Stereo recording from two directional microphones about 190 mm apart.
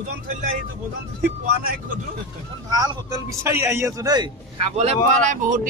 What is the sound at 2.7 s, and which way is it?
A man's voice, 20° right (ahead or behind).